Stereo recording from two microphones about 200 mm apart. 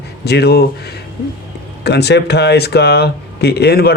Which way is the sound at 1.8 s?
55° left (ahead or behind).